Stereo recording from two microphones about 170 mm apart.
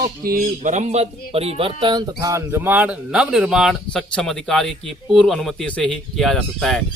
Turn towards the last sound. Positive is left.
turn(degrees=5)  # may be behind; listen again after turning